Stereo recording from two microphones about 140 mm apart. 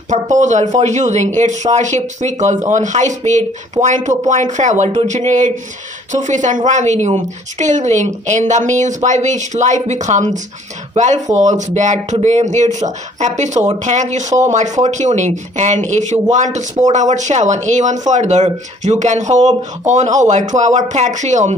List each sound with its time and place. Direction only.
0.1 s speech: 60° right (ahead or behind)